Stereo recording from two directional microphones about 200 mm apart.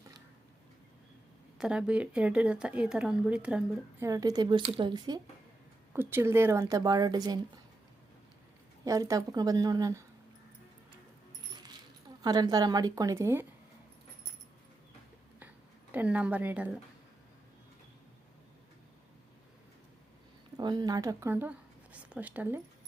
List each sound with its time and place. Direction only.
1.5 s speech: 5° right (ahead or behind)
4.0 s a woman's voice: 20° right (ahead or behind)
5.9 s a woman's voice: 10° right (ahead or behind)
8.8 s a woman's voice: 15° right (ahead or behind)
12.2 s a woman's voice: 20° right (ahead or behind)
15.9 s a woman's voice: 10° right (ahead or behind)
20.6 s a woman's voice: 20° right (ahead or behind)